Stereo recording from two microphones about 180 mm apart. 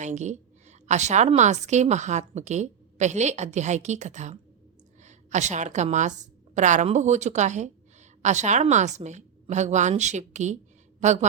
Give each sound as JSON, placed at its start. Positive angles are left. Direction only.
{"t": 0.0, "sound": "a woman's voice", "side_deg": -40}